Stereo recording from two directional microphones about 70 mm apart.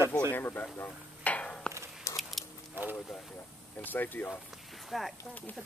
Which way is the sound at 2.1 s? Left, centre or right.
Left.